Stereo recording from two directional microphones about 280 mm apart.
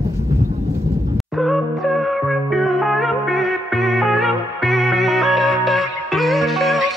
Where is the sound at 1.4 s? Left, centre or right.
Centre.